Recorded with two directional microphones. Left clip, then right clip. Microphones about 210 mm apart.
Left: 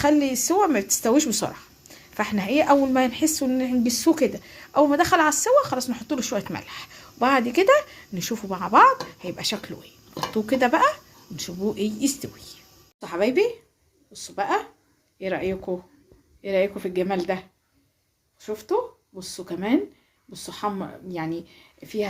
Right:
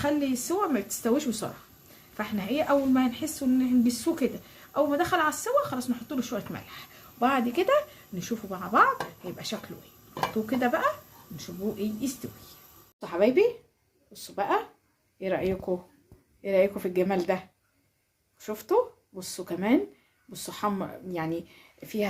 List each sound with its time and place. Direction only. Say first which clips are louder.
0.0 s speech: left 7 dB; 40° left (ahead or behind)
10.3 s speech: left 8 dB; 40° left (ahead or behind)
13.0 s speech: left 1 dB; centre (ahead or behind)